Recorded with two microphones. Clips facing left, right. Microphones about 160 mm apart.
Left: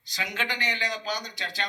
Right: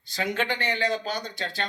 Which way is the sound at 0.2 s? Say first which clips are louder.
Right 5 dB; 50° right (ahead or behind).